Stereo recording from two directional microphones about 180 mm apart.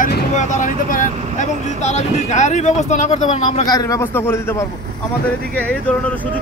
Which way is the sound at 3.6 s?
20° left (ahead or behind).